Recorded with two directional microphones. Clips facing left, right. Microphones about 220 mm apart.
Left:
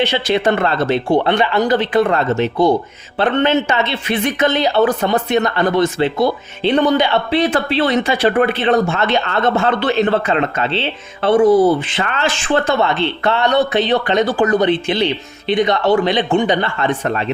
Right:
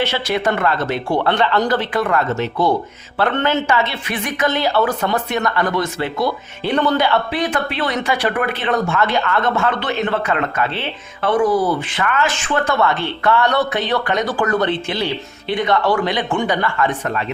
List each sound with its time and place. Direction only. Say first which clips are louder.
0.0 s speech: left 3 dB; 20° left (ahead or behind)
1.3 s speech: left 2 dB; 10° left (ahead or behind)